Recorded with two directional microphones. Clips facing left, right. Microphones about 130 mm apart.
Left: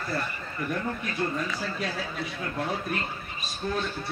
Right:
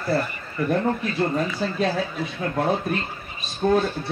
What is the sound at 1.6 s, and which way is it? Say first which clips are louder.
Speech: right 8 dB; 25° right (ahead or behind).